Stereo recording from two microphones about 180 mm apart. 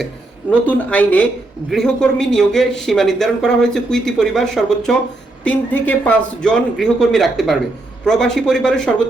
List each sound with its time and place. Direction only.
0.7 s speech: 10° left (ahead or behind)